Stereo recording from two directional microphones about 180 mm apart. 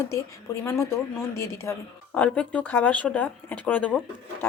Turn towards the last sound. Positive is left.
turn(degrees=10)  # may be behind; listen again after turning